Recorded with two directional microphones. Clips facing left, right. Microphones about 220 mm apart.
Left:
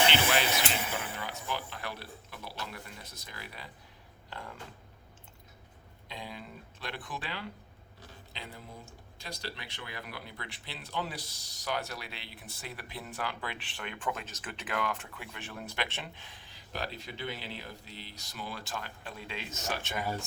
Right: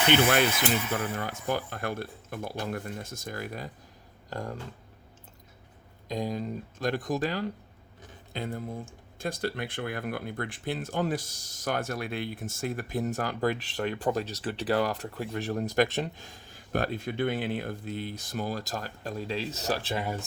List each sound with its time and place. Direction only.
0.1 s speech: 55° right (ahead or behind)
6.1 s speech: 40° right (ahead or behind)